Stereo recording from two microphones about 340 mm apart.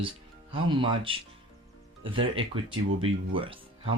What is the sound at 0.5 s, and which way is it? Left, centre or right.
Speech, centre.